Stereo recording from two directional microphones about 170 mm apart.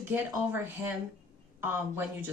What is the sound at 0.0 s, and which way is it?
Speech, 10° right (ahead or behind).